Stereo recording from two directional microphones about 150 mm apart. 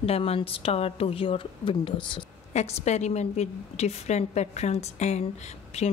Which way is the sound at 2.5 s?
45° left (ahead or behind).